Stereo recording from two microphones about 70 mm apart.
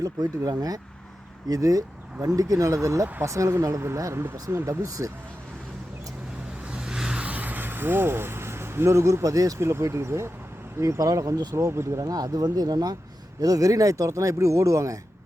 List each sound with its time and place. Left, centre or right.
0.0 s speech: right
6.7 s vehicle: centre; by 10.3 s right
10.8 s speech: right
11.5 s speech: right
12.0 s speech: right